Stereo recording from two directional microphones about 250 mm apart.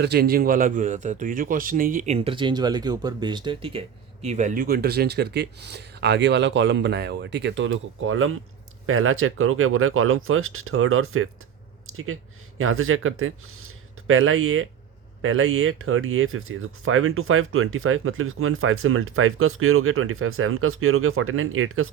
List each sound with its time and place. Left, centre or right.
0.0 s speech: right
11.9 s a sound: right
12.5 s speech: right